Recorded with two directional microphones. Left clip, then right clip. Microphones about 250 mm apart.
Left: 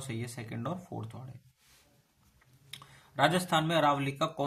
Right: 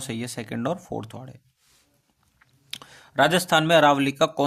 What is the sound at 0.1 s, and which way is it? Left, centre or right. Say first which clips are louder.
Speech: right 10 dB; right.